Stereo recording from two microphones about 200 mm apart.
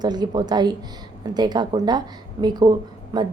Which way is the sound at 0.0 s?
20° right (ahead or behind).